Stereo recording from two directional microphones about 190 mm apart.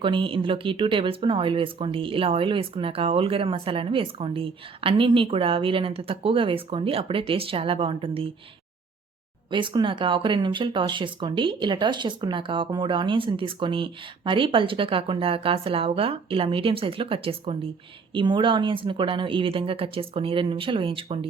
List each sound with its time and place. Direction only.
0.0 s speech: 25° right (ahead or behind)
9.5 s speech: 25° right (ahead or behind)